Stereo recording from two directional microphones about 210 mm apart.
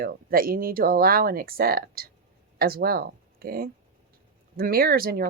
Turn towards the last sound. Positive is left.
turn(degrees=-45)  # may be behind; listen again after turning